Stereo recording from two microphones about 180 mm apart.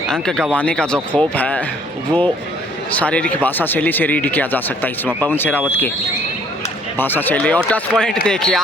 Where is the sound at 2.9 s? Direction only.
5° left (ahead or behind).